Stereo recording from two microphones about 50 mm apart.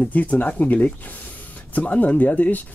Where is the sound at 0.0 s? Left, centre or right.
Left.